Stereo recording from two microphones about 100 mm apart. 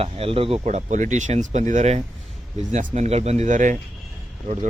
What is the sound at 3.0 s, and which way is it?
Speech, 90° right.